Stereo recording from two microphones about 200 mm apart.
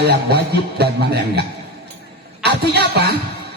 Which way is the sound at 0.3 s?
55° right (ahead or behind).